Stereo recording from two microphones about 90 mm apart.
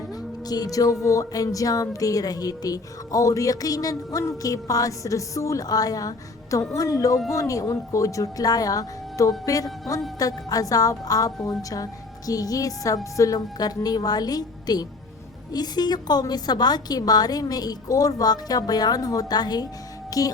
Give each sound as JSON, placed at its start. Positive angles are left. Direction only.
{"t": 0.4, "sound": "a woman's voice", "side_deg": 45}